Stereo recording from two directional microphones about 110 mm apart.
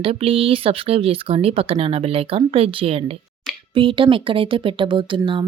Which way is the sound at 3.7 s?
50° right (ahead or behind).